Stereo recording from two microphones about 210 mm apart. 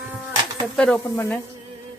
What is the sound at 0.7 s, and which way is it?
Stir, 5° left (ahead or behind).